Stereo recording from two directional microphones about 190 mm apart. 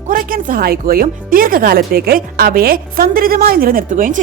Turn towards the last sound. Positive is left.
turn(degrees=-45)  # may be behind; listen again after turning